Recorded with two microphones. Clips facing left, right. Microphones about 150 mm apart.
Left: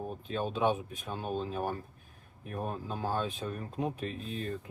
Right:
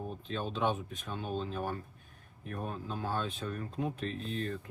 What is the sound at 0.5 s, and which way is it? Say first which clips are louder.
Speech: left 3 dB; 10° left (ahead or behind).